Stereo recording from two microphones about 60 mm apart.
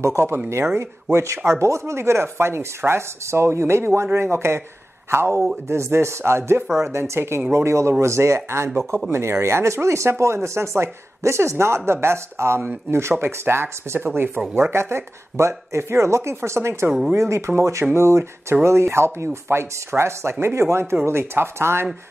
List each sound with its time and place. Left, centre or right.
0.0 s speech: right